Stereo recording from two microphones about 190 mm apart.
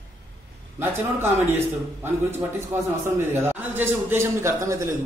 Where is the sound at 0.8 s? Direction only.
10° right (ahead or behind).